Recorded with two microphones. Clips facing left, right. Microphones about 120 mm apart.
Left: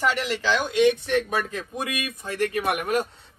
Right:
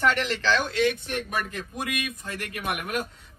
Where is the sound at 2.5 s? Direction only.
35° left (ahead or behind).